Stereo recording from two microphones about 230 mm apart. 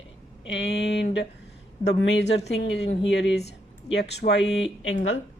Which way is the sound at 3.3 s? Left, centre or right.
Left.